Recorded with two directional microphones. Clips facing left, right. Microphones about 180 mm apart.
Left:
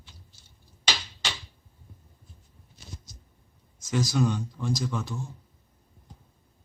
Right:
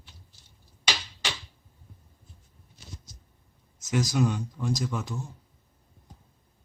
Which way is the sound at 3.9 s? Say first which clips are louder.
Even; 15° right (ahead or behind).